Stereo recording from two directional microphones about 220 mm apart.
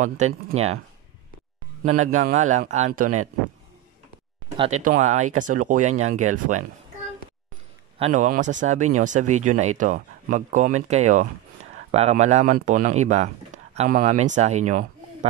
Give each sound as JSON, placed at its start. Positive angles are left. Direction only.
{"t": 0.0, "sound": "speech", "side_deg": -35}
{"t": 1.8, "sound": "speech", "side_deg": -35}
{"t": 4.6, "sound": "speech", "side_deg": -30}
{"t": 8.0, "sound": "speech", "side_deg": -35}